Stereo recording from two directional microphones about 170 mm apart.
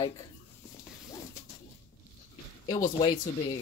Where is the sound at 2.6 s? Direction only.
20° left (ahead or behind).